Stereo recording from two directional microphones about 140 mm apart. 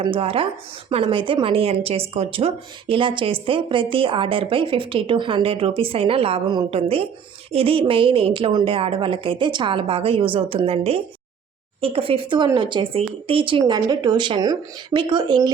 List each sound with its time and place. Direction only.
0.0 s a woman's voice: 40° right (ahead or behind)